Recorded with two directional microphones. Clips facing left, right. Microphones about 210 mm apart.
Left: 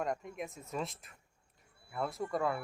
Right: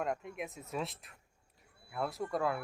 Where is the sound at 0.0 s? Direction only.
Centre (ahead or behind).